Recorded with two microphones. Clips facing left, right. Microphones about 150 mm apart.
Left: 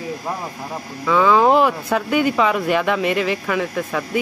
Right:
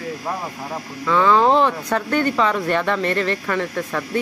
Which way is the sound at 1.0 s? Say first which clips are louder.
Left 1 dB; 5° left (ahead or behind).